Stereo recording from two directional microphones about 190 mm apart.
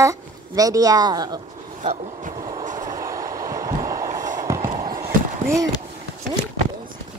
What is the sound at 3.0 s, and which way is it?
Train, 15° right (ahead or behind).